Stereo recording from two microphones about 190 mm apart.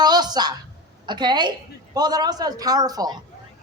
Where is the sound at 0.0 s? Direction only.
20° right (ahead or behind).